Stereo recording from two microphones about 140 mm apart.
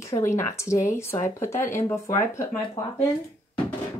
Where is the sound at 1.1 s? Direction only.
55° left (ahead or behind).